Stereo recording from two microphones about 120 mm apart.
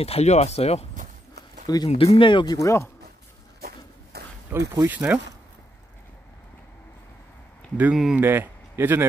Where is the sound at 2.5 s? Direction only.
25° left (ahead or behind).